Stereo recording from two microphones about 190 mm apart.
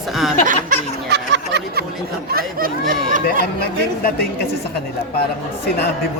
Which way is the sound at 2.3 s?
50° right (ahead or behind).